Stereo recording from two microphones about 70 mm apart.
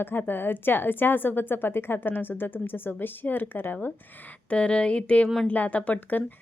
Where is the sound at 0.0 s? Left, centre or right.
Left.